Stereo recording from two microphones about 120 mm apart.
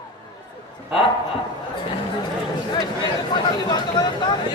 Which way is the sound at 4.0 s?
35° left (ahead or behind).